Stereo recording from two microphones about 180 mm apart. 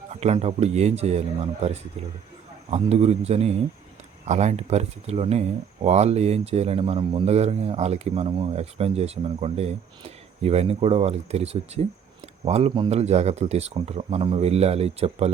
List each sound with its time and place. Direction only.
0.1 s speech: 35° right (ahead or behind)
2.6 s speech: 35° right (ahead or behind)